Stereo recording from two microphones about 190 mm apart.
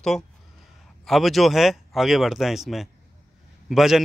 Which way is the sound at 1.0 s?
Centre (ahead or behind).